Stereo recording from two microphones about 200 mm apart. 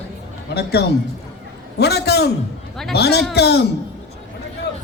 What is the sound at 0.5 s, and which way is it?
A man's voice, 55° left (ahead or behind).